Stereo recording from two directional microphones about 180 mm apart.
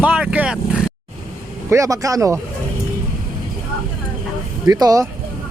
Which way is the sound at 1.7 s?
15° right (ahead or behind).